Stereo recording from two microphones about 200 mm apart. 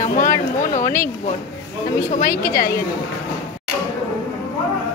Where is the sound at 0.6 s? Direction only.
40° left (ahead or behind).